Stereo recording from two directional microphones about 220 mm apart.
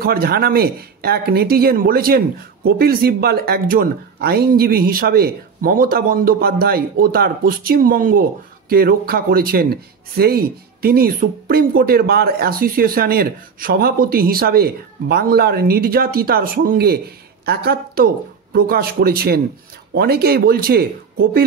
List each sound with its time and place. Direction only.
0.0 s speech: 45° right (ahead or behind)